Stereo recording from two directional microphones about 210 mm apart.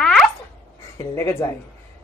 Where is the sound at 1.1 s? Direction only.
10° left (ahead or behind).